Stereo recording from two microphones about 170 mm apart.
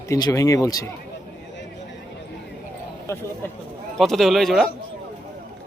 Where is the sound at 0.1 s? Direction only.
20° left (ahead or behind).